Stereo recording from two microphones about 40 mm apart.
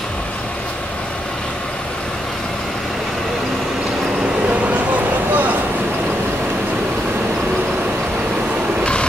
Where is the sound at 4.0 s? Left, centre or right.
Centre.